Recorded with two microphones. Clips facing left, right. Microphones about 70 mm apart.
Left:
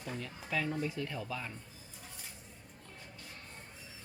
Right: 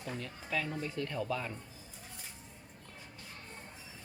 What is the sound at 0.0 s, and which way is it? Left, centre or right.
Speech, centre.